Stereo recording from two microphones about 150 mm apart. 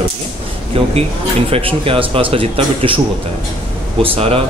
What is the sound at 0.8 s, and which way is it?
Speech, 40° right (ahead or behind).